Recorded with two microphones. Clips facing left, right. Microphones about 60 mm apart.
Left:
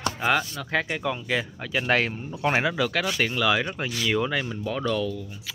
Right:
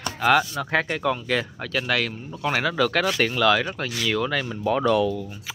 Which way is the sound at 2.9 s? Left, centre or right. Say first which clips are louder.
Right 3 dB; centre.